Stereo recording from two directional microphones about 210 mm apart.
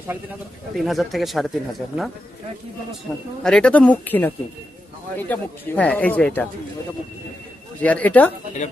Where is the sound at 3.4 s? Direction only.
5° left (ahead or behind).